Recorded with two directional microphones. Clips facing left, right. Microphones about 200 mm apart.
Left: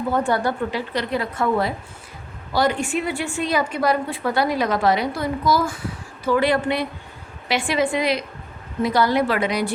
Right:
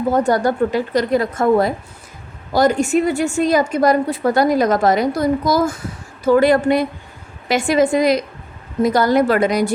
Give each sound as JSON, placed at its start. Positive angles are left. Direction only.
{"t": 0.1, "sound": "a woman's voice", "side_deg": -40}